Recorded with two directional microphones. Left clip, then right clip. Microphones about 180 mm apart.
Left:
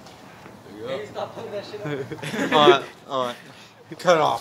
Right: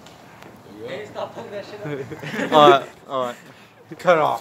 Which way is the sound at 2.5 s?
60° right (ahead or behind).